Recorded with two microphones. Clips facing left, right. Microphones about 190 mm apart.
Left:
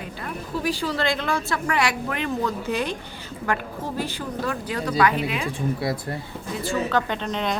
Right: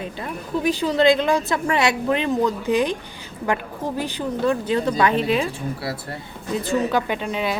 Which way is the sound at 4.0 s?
15° right (ahead or behind).